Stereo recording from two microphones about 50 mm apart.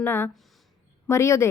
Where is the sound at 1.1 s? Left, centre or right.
Left.